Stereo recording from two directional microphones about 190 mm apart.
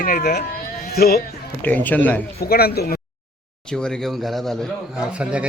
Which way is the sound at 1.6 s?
10° left (ahead or behind).